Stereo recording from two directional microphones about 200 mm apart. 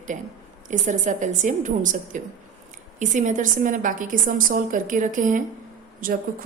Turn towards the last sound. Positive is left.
turn(degrees=-45)  # may be behind; listen again after turning